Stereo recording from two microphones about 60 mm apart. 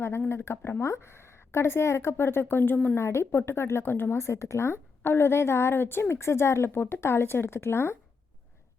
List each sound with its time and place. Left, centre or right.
0.3 s a woman's voice: left
3.0 s a woman's voice: left
4.2 s a woman's voice: left